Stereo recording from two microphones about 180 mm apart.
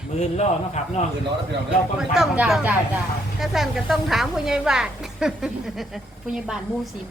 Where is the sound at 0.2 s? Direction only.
40° left (ahead or behind).